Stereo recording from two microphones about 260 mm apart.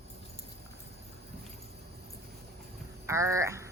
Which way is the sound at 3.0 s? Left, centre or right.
Centre.